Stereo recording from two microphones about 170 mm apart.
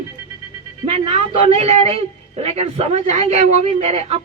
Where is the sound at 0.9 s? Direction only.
35° right (ahead or behind).